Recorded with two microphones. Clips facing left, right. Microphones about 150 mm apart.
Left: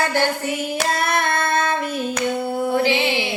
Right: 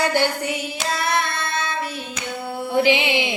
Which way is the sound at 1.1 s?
55° left (ahead or behind).